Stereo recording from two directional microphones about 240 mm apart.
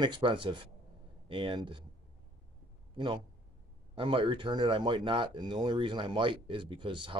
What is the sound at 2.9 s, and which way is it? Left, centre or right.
A man's voice, centre.